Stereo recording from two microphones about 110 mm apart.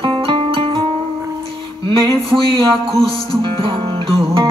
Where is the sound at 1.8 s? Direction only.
50° right (ahead or behind).